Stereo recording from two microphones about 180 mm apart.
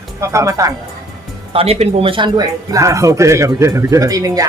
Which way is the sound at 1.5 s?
35° right (ahead or behind).